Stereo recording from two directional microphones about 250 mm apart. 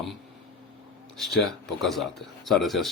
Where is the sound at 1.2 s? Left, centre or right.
Centre.